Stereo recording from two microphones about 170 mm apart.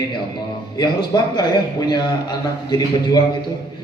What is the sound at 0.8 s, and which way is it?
A man's voice, 25° left (ahead or behind).